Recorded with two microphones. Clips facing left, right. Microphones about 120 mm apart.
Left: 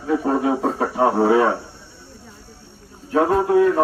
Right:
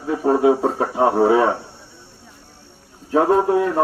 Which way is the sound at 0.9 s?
25° right (ahead or behind).